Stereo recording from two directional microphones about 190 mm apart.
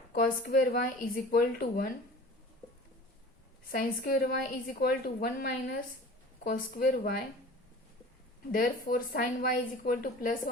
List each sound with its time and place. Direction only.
0.1 s a woman's voice: 45° left (ahead or behind)
3.7 s a woman's voice: 50° left (ahead or behind)
8.5 s a woman's voice: 50° left (ahead or behind)